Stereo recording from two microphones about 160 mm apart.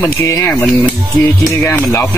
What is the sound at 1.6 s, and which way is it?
Speech, 10° left (ahead or behind).